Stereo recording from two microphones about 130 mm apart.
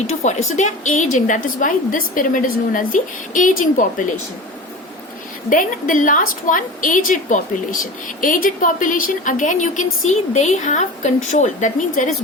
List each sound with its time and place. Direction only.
0.2 s a woman's voice: 65° left (ahead or behind); by 4.0 s 90° left
5.5 s a woman's voice: 90° left
10.3 s a woman's voice: 65° left (ahead or behind)